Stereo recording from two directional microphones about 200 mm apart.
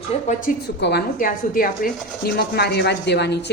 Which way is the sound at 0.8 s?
50° left (ahead or behind).